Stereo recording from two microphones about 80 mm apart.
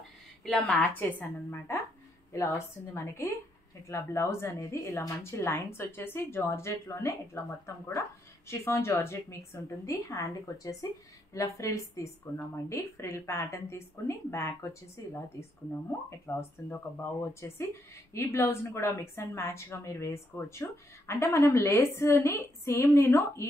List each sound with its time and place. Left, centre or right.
0.5 s a woman's voice: centre
2.3 s a woman's voice: left